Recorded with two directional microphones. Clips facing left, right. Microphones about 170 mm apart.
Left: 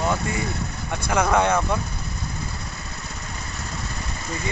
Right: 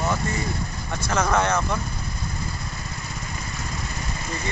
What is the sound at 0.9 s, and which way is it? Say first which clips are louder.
Speech: left 2 dB; 10° left (ahead or behind).